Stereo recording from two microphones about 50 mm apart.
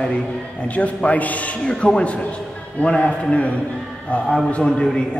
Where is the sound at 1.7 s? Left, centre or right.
Centre.